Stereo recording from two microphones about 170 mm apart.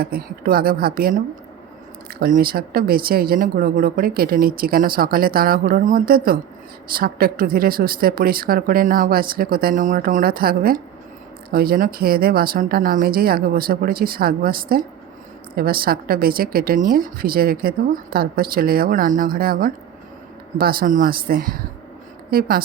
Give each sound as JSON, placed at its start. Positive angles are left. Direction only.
{"t": 0.0, "sound": "speech", "side_deg": -60}
{"t": 2.2, "sound": "speech", "side_deg": -60}